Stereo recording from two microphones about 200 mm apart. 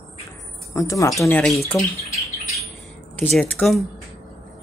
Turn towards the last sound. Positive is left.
turn(degrees=0)  # may be behind; listen again after turning